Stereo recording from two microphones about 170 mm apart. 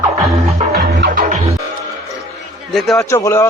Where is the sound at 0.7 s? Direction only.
70° right (ahead or behind).